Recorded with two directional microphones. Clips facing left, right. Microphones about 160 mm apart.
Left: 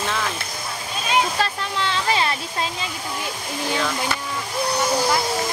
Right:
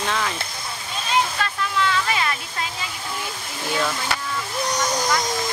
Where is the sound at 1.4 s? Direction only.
30° left (ahead or behind).